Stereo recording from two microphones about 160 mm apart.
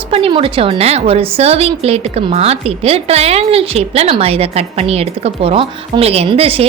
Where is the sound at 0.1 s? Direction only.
35° right (ahead or behind).